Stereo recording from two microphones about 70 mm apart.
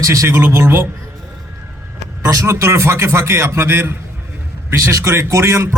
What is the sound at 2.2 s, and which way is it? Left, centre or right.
A man's voice, right.